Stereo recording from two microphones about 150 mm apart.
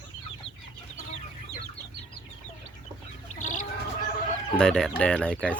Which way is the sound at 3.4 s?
55° left (ahead or behind).